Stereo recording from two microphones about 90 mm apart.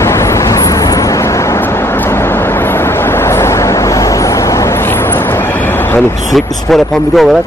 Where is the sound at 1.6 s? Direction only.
30° left (ahead or behind).